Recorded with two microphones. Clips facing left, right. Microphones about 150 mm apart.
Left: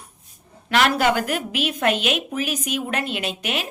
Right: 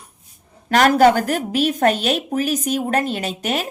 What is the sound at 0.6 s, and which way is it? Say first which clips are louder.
Speech: right 6 dB; 40° right (ahead or behind).